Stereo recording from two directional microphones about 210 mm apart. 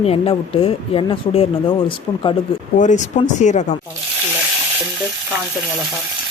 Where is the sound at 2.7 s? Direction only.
35° left (ahead or behind).